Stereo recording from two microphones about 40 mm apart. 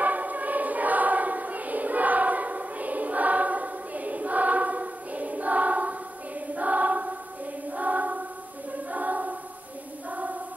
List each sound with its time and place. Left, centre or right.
0.0 s choir: right